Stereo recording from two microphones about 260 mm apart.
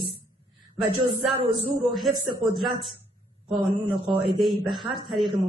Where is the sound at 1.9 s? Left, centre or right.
Centre.